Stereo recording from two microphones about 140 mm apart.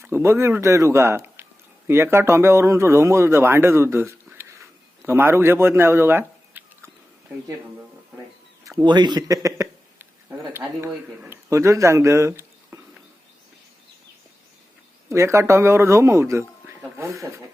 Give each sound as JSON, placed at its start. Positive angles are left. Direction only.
{"t": 0.0, "sound": "speech", "side_deg": -20}
{"t": 8.6, "sound": "a sound", "side_deg": -25}
{"t": 10.8, "sound": "speech", "side_deg": -15}
{"t": 15.1, "sound": "a man's voice", "side_deg": -20}